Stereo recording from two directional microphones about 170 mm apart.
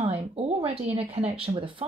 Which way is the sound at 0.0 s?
35° right (ahead or behind).